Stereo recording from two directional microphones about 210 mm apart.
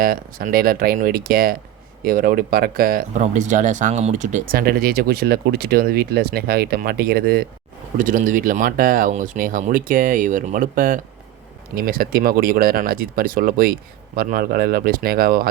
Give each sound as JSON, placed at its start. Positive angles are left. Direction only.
{"t": 0.0, "sound": "speech", "side_deg": -45}